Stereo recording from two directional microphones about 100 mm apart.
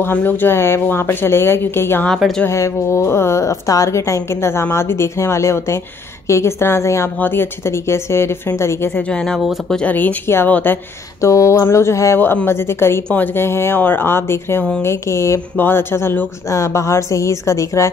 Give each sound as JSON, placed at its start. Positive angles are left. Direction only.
{"t": 0.0, "sound": "speech", "side_deg": 20}
{"t": 2.0, "sound": "a woman's voice", "side_deg": 5}
{"t": 2.4, "sound": "speech", "side_deg": 30}
{"t": 9.8, "sound": "speech", "side_deg": 15}
{"t": 11.1, "sound": "speech", "side_deg": 30}